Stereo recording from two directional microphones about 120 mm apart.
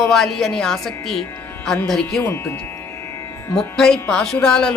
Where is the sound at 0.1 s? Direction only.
Centre (ahead or behind).